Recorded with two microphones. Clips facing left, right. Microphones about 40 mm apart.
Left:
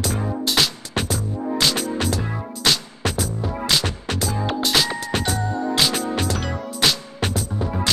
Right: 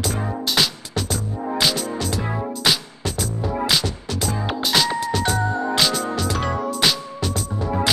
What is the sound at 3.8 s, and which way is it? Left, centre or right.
Music, left.